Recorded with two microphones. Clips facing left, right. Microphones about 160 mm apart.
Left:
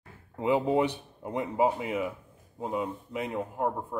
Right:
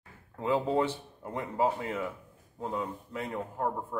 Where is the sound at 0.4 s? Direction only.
15° left (ahead or behind).